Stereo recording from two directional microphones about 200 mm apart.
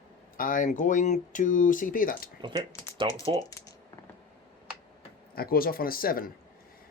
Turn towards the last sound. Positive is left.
turn(degrees=45)  # may be behind; listen again after turning